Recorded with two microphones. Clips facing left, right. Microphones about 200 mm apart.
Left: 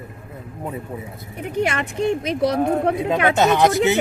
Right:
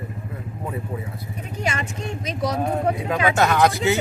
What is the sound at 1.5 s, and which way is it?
Speech, 60° left (ahead or behind).